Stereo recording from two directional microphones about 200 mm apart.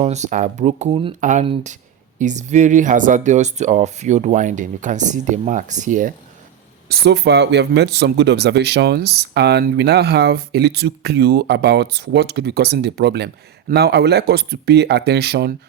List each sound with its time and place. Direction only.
0.0 s speech: 35° right (ahead or behind)
6.8 s speech: 55° right (ahead or behind)